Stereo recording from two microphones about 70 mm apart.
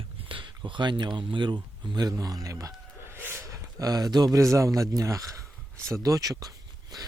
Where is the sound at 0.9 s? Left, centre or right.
Right.